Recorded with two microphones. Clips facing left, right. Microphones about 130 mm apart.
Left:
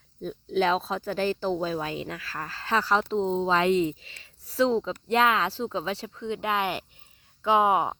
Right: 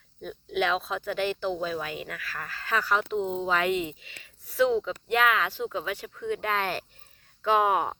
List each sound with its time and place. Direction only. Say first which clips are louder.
0.2 s speech: left 3 dB; 30° left (ahead or behind)